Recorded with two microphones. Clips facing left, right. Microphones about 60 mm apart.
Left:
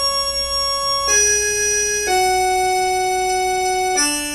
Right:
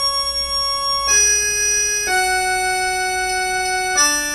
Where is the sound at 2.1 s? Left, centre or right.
Right.